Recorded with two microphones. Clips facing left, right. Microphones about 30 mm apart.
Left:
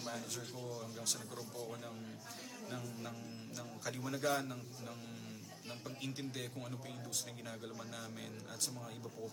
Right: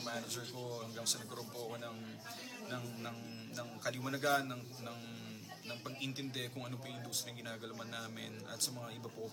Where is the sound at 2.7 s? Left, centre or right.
Right.